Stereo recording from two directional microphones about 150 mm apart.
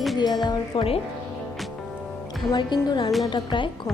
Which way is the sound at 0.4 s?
30° left (ahead or behind).